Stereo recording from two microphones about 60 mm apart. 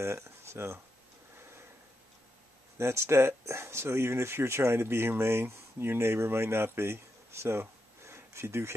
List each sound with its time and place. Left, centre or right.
0.0 s speech: right
2.8 s speech: right
8.1 s a sound: right